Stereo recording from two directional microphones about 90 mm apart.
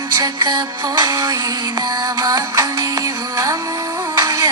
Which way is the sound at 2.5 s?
40° right (ahead or behind).